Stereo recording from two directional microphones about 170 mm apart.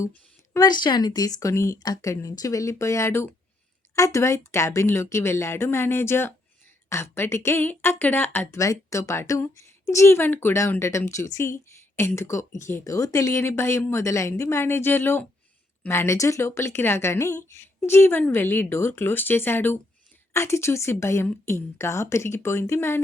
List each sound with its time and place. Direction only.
0.5 s a woman's voice: 25° left (ahead or behind)